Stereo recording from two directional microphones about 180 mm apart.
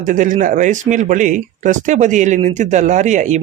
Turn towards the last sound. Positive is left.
turn(degrees=-40)  # may be behind; listen again after turning